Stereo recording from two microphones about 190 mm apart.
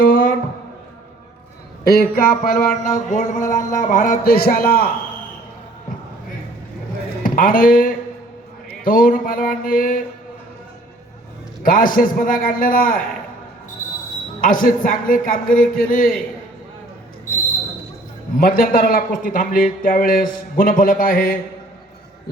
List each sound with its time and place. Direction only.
0.0 s music: 50° left (ahead or behind)
1.9 s a man's voice: 50° left (ahead or behind)
7.2 s a man's voice: 45° left (ahead or behind)
11.6 s a man's voice: 45° left (ahead or behind)
14.4 s a man's voice: 45° left (ahead or behind)
18.3 s a man's voice: 50° left (ahead or behind)